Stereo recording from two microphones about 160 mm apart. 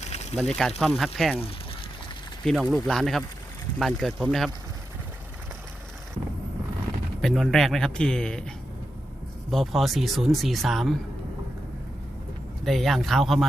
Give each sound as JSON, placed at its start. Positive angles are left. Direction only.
{"t": 0.0, "sound": "a sound", "side_deg": 45}
{"t": 0.3, "sound": "speech", "side_deg": 0}
{"t": 2.4, "sound": "speech", "side_deg": 0}
{"t": 7.2, "sound": "speech", "side_deg": 0}
{"t": 9.5, "sound": "speech", "side_deg": 0}
{"t": 12.6, "sound": "speech", "side_deg": 0}